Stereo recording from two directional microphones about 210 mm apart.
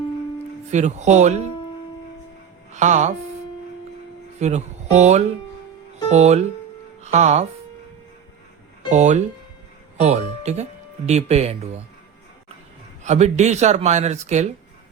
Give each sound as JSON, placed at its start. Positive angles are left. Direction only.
{"t": 0.7, "sound": "speech", "side_deg": -35}
{"t": 2.7, "sound": "speech", "side_deg": -35}
{"t": 4.4, "sound": "speech", "side_deg": -30}
{"t": 8.9, "sound": "speech", "side_deg": -35}
{"t": 13.1, "sound": "speech", "side_deg": -35}